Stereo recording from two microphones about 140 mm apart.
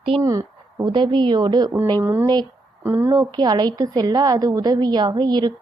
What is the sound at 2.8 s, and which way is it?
Speech, 15° right (ahead or behind).